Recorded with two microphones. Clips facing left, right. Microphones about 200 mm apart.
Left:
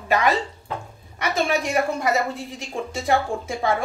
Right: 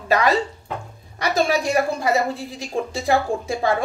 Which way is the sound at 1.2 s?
35° right (ahead or behind).